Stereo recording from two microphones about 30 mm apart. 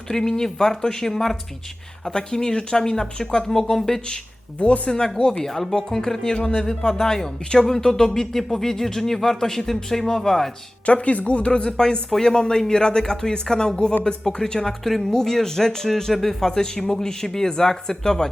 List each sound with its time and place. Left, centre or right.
0.1 s speech: centre
4.6 s speech: left
5.4 s speech: centre
10.8 s speech: left; by 16.5 s centre
16.5 s speech: left